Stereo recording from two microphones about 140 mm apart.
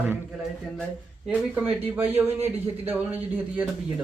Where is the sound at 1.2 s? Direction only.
10° right (ahead or behind).